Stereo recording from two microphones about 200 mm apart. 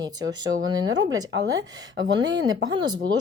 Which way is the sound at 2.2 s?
70° right (ahead or behind).